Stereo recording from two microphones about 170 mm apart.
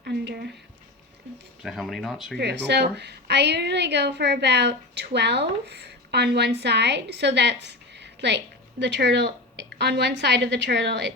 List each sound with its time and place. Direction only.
0.0 s a sound: 75° right (ahead or behind)
1.6 s speech: centre (ahead or behind)
2.4 s a woman's voice: 80° right